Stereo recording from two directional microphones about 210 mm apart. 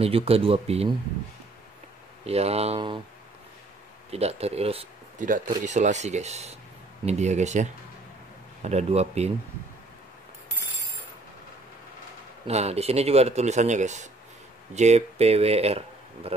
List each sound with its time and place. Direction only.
0.0 s speech: 30° right (ahead or behind)
2.2 s speech: 30° right (ahead or behind)
4.1 s speech: 30° right (ahead or behind)
12.4 s speech: 30° right (ahead or behind)